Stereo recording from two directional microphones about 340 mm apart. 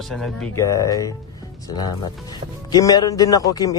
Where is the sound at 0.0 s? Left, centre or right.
Centre.